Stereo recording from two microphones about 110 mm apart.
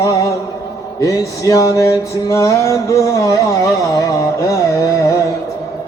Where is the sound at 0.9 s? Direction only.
30° left (ahead or behind).